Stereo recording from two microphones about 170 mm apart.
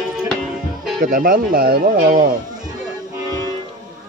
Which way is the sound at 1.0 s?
55° right (ahead or behind).